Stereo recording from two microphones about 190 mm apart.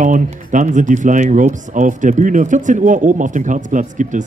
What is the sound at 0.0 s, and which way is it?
Speech, 40° right (ahead or behind).